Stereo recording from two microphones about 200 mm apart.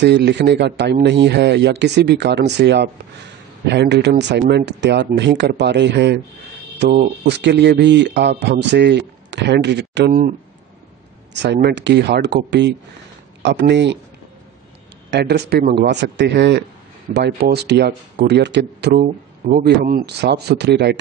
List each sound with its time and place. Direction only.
0.0 s a man's voice: 60° right (ahead or behind)
11.3 s a man's voice: 55° right (ahead or behind)
15.0 s a man's voice: 55° right (ahead or behind)
18.9 s a man's voice: 40° right (ahead or behind); by 21.0 s 55° right (ahead or behind)